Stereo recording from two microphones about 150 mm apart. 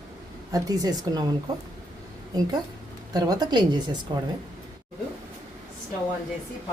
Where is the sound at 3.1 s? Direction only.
25° right (ahead or behind).